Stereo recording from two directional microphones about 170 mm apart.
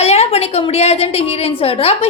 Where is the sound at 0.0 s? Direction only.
40° left (ahead or behind).